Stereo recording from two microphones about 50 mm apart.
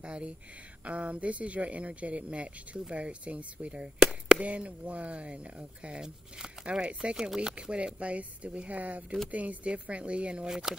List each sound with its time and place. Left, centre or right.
0.0 s speech: right
10.5 s speech: centre